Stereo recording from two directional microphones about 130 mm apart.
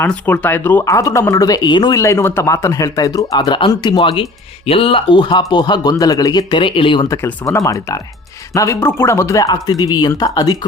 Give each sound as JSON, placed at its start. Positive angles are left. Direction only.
{"t": 0.0, "sound": "speech", "side_deg": 10}
{"t": 2.0, "sound": "speech", "side_deg": 20}
{"t": 7.1, "sound": "speech", "side_deg": 20}